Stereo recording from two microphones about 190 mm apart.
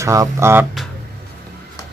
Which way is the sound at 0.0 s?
15° right (ahead or behind).